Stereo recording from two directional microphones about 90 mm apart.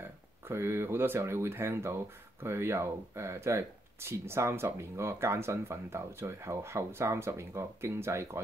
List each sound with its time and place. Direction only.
0.5 s speech: 25° right (ahead or behind)